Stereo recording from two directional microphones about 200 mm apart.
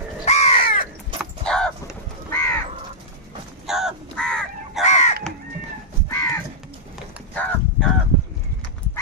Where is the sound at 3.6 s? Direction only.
Centre (ahead or behind).